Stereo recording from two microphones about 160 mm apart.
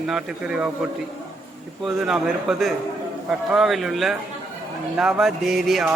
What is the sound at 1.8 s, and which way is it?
Speech, centre (ahead or behind).